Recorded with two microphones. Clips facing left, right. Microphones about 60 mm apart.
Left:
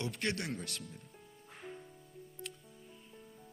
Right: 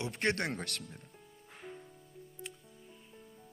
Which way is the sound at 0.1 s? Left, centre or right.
Right.